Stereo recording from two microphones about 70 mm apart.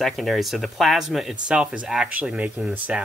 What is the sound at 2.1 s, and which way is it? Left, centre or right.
Speech, right.